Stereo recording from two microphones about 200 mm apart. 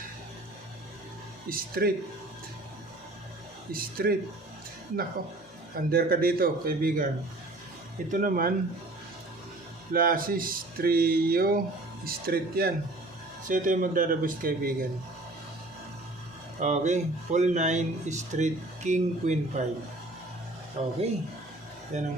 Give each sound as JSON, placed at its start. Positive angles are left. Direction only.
{"t": 1.5, "sound": "speech", "side_deg": -45}
{"t": 3.7, "sound": "speech", "side_deg": -45}
{"t": 5.7, "sound": "speech", "side_deg": -50}
{"t": 8.1, "sound": "speech", "side_deg": -45}
{"t": 9.9, "sound": "speech", "side_deg": -45}
{"t": 16.6, "sound": "speech", "side_deg": -35}
{"t": 20.8, "sound": "speech", "side_deg": -30}
{"t": 21.9, "sound": "speech", "side_deg": -35}